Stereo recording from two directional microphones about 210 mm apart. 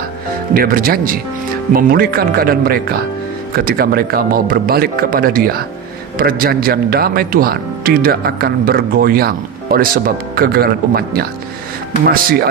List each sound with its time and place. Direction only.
0.6 s a man's voice: 45° right (ahead or behind)